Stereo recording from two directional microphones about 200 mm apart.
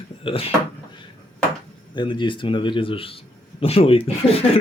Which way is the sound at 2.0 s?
25° left (ahead or behind).